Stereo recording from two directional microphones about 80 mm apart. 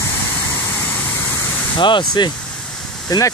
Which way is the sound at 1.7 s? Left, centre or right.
Left.